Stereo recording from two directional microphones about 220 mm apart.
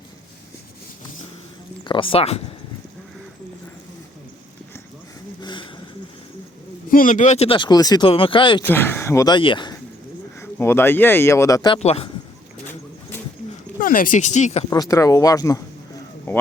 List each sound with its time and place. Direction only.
1.8 s speech: 20° left (ahead or behind)
5.4 s a sound: 20° left (ahead or behind)
6.9 s speech: 35° left (ahead or behind)
8.6 s speech: 10° left (ahead or behind)
10.4 s speech: 10° left (ahead or behind)
11.8 s speech: 30° left (ahead or behind)
13.7 s speech: 40° left (ahead or behind)
14.7 s speech: 15° left (ahead or behind)
16.3 s a sound: 10° left (ahead or behind)